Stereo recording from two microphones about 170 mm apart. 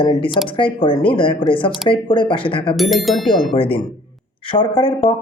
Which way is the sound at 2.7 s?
Centre (ahead or behind).